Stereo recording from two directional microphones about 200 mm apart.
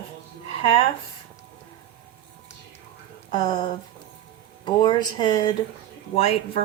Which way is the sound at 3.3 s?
20° left (ahead or behind).